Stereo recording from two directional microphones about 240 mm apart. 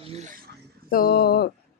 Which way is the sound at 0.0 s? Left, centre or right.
Right.